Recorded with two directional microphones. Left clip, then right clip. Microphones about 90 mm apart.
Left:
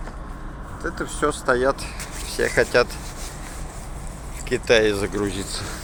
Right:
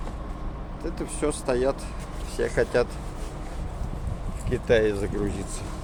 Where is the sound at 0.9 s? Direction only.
5° right (ahead or behind).